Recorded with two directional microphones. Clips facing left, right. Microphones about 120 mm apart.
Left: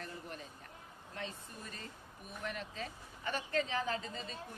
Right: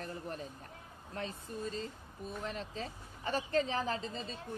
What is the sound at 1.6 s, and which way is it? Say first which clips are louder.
A woman's voice: right 9 dB; 25° right (ahead or behind).